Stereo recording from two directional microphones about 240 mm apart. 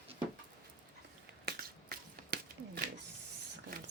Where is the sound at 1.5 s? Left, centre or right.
Right.